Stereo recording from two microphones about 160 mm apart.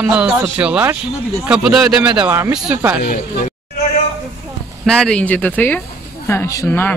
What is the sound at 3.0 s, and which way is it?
Speech, 60° left (ahead or behind).